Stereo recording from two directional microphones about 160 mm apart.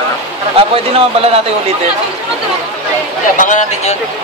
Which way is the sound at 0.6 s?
35° right (ahead or behind).